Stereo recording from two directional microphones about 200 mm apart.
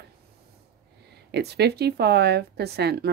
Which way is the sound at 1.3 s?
55° right (ahead or behind).